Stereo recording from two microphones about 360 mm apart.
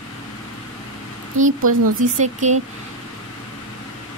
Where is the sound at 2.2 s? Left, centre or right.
Centre.